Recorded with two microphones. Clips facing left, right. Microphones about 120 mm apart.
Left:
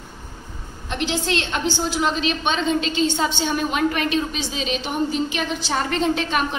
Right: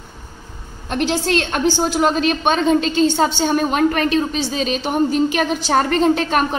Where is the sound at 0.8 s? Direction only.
45° right (ahead or behind).